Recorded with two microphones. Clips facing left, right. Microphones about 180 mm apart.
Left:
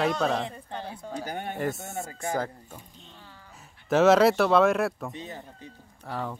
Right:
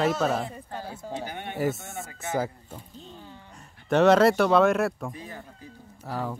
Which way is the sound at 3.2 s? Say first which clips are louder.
Right 5 dB; 20° right (ahead or behind).